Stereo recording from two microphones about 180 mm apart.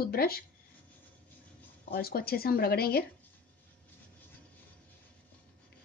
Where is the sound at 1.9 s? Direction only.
60° left (ahead or behind).